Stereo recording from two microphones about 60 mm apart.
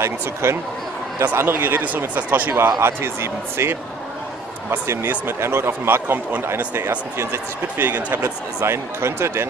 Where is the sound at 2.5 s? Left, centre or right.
Right.